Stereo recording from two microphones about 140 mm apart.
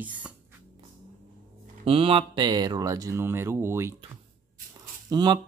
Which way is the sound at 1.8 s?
40° right (ahead or behind).